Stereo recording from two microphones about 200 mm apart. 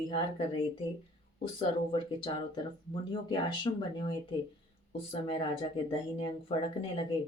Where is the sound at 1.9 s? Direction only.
25° left (ahead or behind).